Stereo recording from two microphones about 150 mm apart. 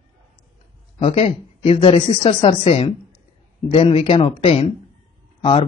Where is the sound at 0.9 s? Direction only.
40° left (ahead or behind).